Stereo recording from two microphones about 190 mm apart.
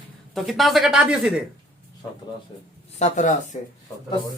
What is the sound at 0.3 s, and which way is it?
Speech, centre (ahead or behind).